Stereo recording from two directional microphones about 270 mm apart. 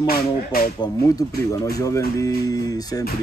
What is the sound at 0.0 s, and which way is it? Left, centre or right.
Speech, left.